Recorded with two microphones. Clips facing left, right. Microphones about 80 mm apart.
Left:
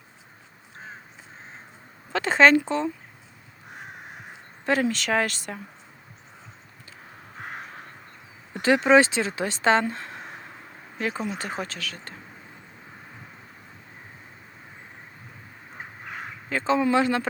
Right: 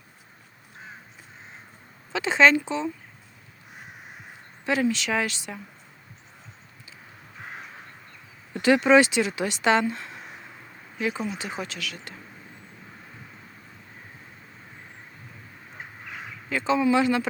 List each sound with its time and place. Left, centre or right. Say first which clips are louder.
2.1 s speech: left 2 dB; left
4.6 s speech: left 1 dB; left
7.3 s crow: left 3 dB; left
8.6 s speech: even; left
11.3 s speech: left 1 dB; left
16.1 s speech: left 1 dB; left